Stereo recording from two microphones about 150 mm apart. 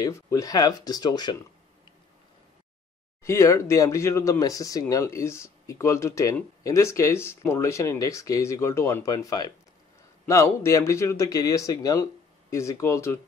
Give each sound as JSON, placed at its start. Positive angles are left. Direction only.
{"t": 0.0, "sound": "speech", "side_deg": 20}
{"t": 3.3, "sound": "speech", "side_deg": 20}